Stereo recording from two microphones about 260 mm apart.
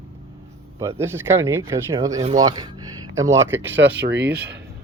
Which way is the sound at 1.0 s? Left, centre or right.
Centre.